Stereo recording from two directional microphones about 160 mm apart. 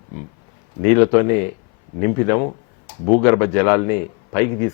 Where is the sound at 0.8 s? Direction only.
20° left (ahead or behind).